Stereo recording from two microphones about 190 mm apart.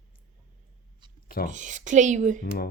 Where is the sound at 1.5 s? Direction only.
40° right (ahead or behind).